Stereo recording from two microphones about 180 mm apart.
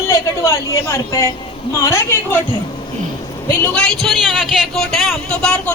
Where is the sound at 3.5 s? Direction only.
10° left (ahead or behind).